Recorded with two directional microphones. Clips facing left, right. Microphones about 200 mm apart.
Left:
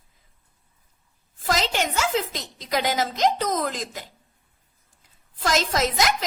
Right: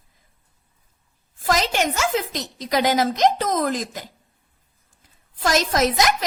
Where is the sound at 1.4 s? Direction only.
45° right (ahead or behind).